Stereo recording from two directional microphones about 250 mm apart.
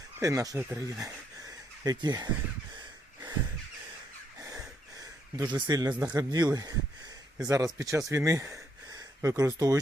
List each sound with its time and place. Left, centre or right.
0.2 s speech: centre
2.7 s breathing: centre
4.9 s a sound: centre
5.9 s speech: centre